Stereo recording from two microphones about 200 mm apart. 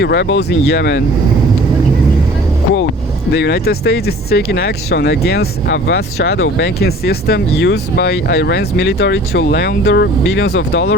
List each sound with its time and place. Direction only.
0.0 s speech: 60° left (ahead or behind)
3.3 s speech: 55° left (ahead or behind)